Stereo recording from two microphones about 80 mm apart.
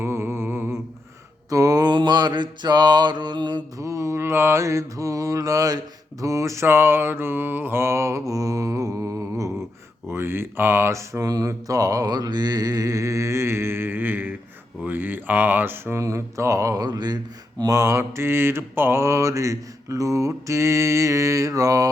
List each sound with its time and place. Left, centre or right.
0.0 s humming: right
1.5 s mantra: right
3.8 s mantra: right
14.8 s speech: right
16.8 s speech: right
17.7 s mantra: right